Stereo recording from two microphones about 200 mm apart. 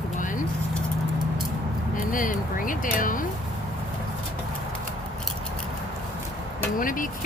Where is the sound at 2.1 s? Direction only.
40° left (ahead or behind).